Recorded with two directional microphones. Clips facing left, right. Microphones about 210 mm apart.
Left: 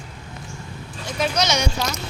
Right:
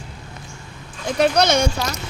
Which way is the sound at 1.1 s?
60° right (ahead or behind).